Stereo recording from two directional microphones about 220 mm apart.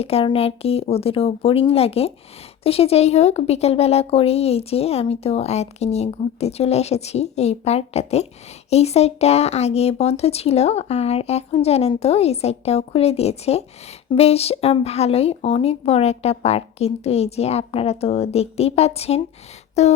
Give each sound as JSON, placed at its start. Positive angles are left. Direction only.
{"t": 0.0, "sound": "speech", "side_deg": 25}